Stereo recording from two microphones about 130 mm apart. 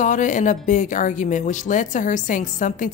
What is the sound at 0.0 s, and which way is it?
Speech, 75° left (ahead or behind).